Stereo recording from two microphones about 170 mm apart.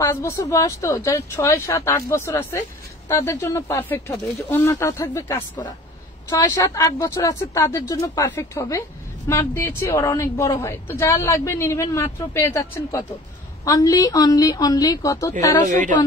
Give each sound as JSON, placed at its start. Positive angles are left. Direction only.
{"t": 0.0, "sound": "a woman's voice", "side_deg": 15}
{"t": 15.7, "sound": "a woman's voice", "side_deg": -50}